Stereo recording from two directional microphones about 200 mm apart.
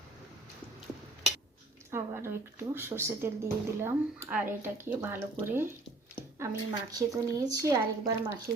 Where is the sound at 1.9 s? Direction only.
15° right (ahead or behind).